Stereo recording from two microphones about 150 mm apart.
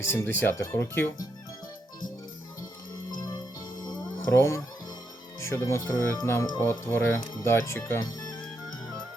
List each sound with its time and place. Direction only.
0.0 s speech: 15° left (ahead or behind)
4.3 s speech: 20° left (ahead or behind)